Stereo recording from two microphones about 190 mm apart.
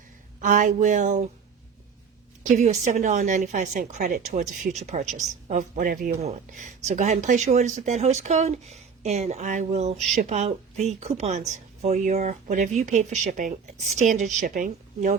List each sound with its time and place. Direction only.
0.4 s speech: 40° right (ahead or behind)
2.4 s speech: 40° right (ahead or behind)